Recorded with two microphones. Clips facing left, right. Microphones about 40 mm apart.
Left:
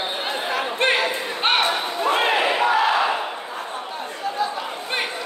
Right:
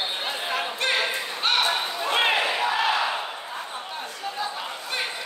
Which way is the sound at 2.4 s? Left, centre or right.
Left.